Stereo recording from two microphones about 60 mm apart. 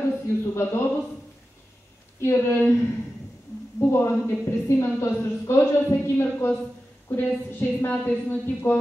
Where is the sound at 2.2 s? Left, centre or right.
Left.